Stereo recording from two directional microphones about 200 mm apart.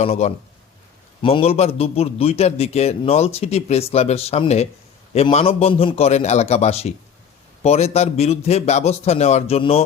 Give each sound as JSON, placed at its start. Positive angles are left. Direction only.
{"t": 0.0, "sound": "a man's voice", "side_deg": 30}